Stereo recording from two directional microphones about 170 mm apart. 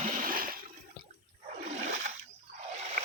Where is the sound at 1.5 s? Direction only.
40° right (ahead or behind).